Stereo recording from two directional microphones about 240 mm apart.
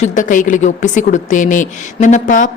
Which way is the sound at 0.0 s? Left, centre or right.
Left.